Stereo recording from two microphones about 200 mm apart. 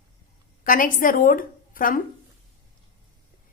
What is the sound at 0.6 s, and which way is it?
A woman's voice, 45° left (ahead or behind).